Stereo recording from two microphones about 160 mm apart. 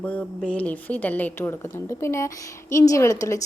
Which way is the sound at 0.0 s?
10° left (ahead or behind).